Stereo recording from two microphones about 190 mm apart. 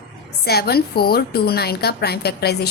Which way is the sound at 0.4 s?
55° left (ahead or behind).